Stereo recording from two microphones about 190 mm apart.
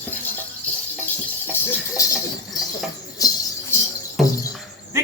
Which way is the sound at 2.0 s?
15° left (ahead or behind).